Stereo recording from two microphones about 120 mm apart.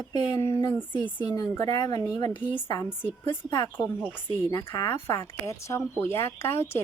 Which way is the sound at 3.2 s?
40° left (ahead or behind).